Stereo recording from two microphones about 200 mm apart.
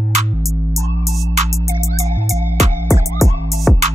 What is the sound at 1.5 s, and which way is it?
Music, 15° right (ahead or behind).